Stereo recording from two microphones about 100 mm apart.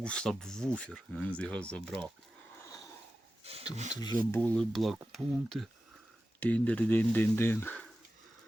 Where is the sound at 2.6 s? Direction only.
35° left (ahead or behind).